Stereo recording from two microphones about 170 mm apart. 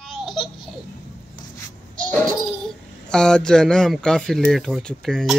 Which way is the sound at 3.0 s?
5° left (ahead or behind).